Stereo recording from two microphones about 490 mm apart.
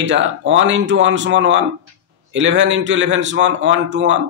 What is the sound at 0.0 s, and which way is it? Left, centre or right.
A man's voice, right.